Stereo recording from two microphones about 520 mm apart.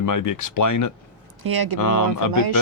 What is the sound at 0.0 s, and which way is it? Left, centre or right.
Speech, left.